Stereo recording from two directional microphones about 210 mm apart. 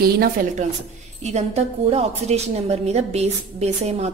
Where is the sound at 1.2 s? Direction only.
30° right (ahead or behind).